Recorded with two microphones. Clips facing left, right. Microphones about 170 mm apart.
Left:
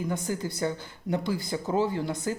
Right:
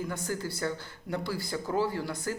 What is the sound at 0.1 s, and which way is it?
Speech, 15° left (ahead or behind).